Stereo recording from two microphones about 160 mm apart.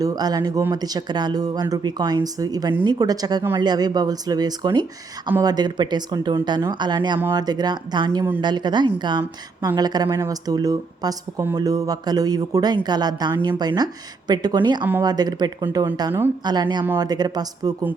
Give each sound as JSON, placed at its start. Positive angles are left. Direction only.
{"t": 0.0, "sound": "a woman's voice", "side_deg": -25}